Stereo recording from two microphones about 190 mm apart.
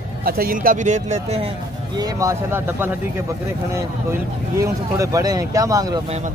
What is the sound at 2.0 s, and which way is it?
Speech, 20° right (ahead or behind).